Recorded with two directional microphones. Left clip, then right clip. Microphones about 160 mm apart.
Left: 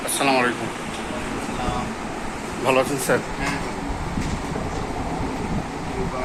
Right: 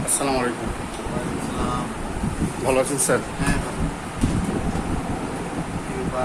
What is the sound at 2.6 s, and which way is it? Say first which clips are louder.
Speech: left 1 dB; 15° right (ahead or behind).